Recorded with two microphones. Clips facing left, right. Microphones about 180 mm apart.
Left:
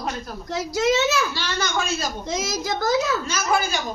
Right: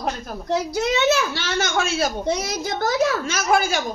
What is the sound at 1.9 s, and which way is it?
A woman's voice, 65° right (ahead or behind).